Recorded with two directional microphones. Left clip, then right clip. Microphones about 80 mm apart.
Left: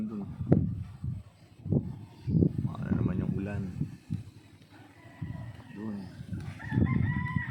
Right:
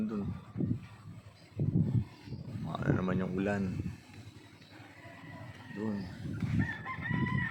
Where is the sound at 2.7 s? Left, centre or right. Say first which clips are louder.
Right 2 dB; right.